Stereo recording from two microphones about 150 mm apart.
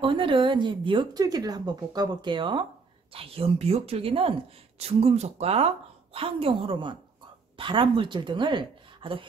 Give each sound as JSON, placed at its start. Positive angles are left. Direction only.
{"t": 0.0, "sound": "a woman's voice", "side_deg": -35}